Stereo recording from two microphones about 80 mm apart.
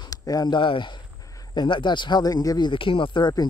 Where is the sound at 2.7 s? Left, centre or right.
Left.